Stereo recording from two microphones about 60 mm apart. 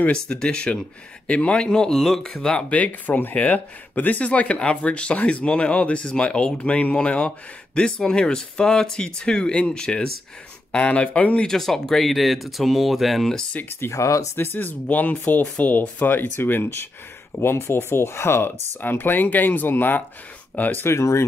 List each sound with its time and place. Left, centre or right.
0.1 s speech: centre
2.5 s speech: left
11.4 s speech: centre
13.7 s speech: left
14.3 s speech: left
18.8 s speech: left
20.8 s speech: left